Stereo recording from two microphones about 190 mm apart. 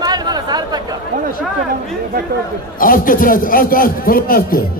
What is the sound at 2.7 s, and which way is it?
A man's voice, 45° left (ahead or behind).